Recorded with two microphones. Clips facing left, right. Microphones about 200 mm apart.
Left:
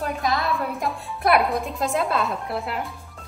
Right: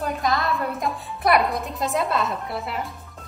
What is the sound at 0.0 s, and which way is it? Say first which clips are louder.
A woman's voice: right 1 dB; centre (ahead or behind).